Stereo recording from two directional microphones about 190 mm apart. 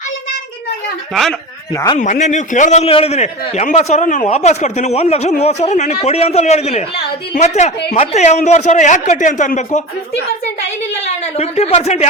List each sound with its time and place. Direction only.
1.1 s speech: centre (ahead or behind)
1.7 s a man's voice: 15° left (ahead or behind)
2.0 s a man's voice: 40° left (ahead or behind)
11.0 s a man's voice: 35° left (ahead or behind)